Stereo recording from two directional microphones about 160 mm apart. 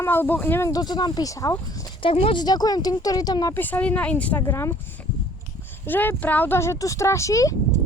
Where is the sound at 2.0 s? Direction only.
35° left (ahead or behind).